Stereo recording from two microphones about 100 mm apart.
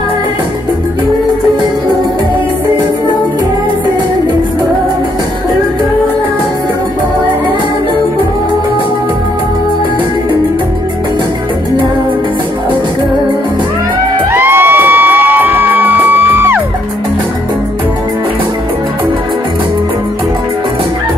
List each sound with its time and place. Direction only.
14.3 s music: 20° right (ahead or behind)